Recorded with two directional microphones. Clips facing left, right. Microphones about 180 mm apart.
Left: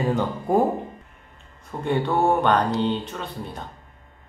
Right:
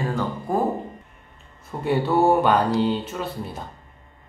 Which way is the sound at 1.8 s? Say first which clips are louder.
Right 2 dB; 5° right (ahead or behind).